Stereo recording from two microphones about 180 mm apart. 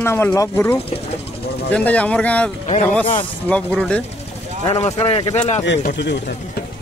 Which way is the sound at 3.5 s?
5° left (ahead or behind).